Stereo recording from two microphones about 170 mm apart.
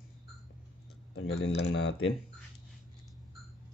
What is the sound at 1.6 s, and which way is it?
Speech, 90° left.